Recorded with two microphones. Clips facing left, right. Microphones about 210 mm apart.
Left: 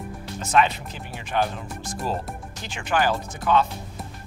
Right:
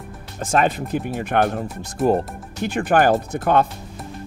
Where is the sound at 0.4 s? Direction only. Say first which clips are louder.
Right 2 dB; 50° right (ahead or behind).